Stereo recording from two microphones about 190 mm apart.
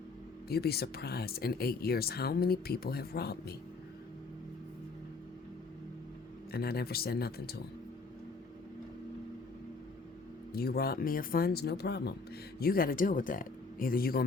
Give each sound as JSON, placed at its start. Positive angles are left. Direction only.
{"t": 0.4, "sound": "speech", "side_deg": 55}
{"t": 6.5, "sound": "speech", "side_deg": 55}
{"t": 10.5, "sound": "speech", "side_deg": 55}